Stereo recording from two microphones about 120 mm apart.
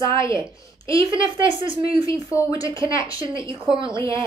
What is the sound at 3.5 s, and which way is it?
Speech, 45° right (ahead or behind).